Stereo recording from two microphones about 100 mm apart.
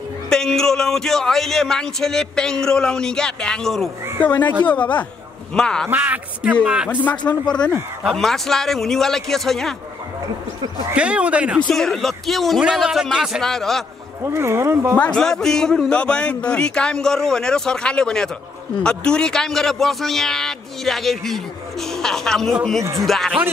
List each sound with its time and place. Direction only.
0.3 s a man's voice: 5° left (ahead or behind)
4.3 s a man's voice: 20° left (ahead or behind)
5.9 s a man's voice: 15° right (ahead or behind)
6.9 s a man's voice: 15° left (ahead or behind)
10.9 s a man's voice: 10° right (ahead or behind)
11.6 s a man's voice: 5° left (ahead or behind)
14.2 s speech: 25° right (ahead or behind)
15.0 s a man's voice: 10° left (ahead or behind)